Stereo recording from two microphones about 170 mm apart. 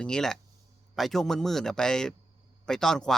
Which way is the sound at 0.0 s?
5° left (ahead or behind).